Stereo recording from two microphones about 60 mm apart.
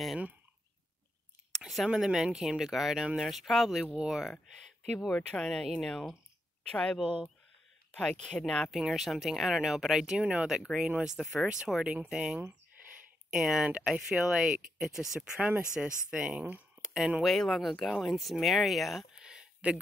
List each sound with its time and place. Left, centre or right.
1.9 s speech: centre
5.0 s speech: centre
6.7 s speech: centre
8.6 s speech: centre
17.2 s speech: centre
19.1 s a sound: centre
19.6 s speech: right